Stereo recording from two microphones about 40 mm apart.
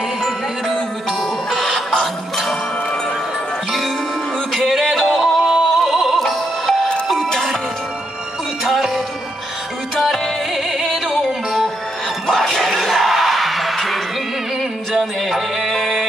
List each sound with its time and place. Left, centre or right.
1.5 s music: centre
4.5 s music: centre
6.2 s music: centre
9.9 s music: centre